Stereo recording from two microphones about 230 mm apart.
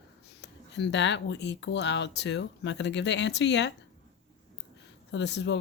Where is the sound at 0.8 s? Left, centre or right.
Left.